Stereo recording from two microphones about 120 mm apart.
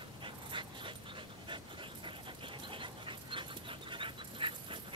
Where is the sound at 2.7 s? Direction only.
45° right (ahead or behind).